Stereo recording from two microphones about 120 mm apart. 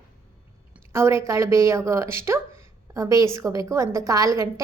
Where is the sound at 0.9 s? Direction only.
20° right (ahead or behind).